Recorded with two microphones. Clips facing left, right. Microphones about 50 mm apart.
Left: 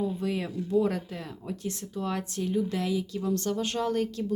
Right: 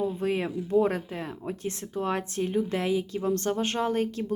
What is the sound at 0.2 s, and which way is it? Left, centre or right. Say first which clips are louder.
Speech: right 3 dB; right.